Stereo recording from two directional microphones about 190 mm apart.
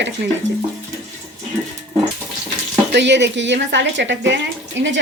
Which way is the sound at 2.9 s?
65° right (ahead or behind).